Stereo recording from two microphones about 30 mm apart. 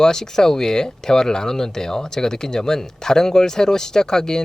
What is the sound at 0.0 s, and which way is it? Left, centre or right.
Speech, centre.